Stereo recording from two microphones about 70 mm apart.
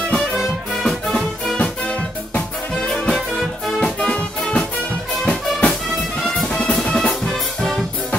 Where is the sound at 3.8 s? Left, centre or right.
Centre.